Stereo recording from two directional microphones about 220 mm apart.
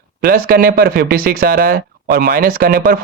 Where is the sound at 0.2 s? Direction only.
45° right (ahead or behind).